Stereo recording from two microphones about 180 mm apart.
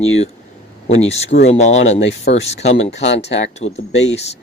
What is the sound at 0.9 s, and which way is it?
Speech, 35° left (ahead or behind).